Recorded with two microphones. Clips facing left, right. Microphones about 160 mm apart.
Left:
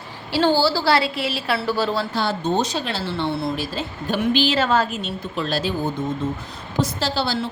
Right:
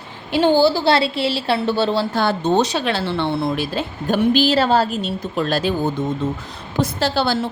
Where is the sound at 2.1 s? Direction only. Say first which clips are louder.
Right 5 dB; 65° right (ahead or behind).